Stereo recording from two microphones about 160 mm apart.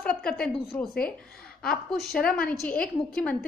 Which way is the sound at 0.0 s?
5° left (ahead or behind).